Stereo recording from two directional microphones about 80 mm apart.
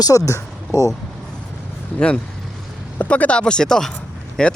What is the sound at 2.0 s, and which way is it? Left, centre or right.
Speech, centre.